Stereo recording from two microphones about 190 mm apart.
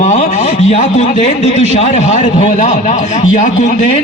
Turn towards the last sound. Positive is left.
turn(degrees=40)  # may be behind; listen again after turning